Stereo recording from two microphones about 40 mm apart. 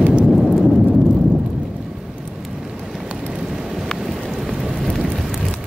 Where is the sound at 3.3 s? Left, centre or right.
Centre.